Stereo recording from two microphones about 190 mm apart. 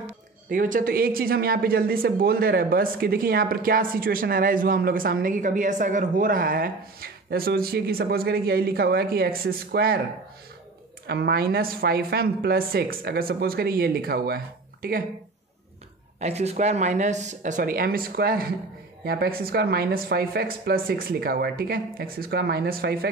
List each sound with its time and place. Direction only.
0.5 s a woman's voice: 45° right (ahead or behind)
11.1 s a woman's voice: 55° right (ahead or behind)
16.2 s a woman's voice: 35° right (ahead or behind); by 22.9 s 55° right (ahead or behind)